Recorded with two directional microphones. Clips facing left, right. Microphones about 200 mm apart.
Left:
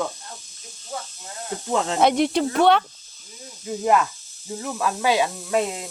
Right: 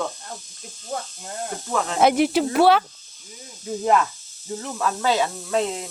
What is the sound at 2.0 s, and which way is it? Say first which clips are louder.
Speech: right 2 dB; 5° right (ahead or behind).